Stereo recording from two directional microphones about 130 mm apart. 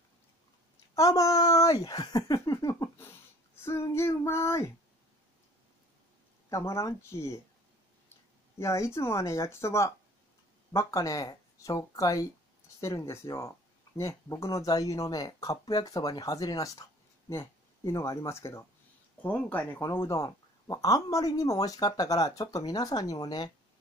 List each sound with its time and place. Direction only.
0.9 s speech: 25° left (ahead or behind)
6.5 s speech: 20° left (ahead or behind)
8.5 s speech: 20° left (ahead or behind)